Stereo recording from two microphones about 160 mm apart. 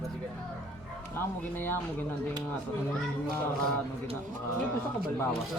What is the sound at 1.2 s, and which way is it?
Speech, 15° left (ahead or behind).